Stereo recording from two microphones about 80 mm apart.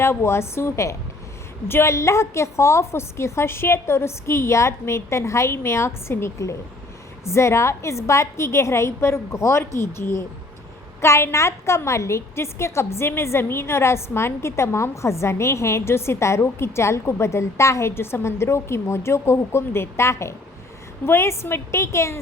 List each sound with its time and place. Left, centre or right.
0.0 s a woman's voice: left